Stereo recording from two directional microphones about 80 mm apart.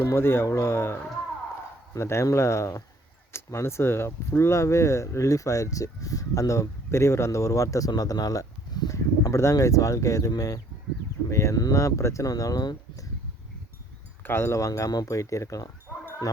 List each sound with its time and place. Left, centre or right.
0.0 s speech: left
8.9 s speech: left
14.3 s speech: left